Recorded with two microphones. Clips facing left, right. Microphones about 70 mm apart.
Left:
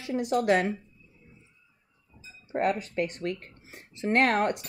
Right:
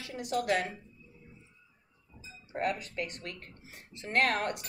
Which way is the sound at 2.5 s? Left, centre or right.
Left.